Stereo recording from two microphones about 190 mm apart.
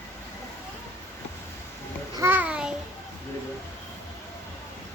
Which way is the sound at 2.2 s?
10° right (ahead or behind).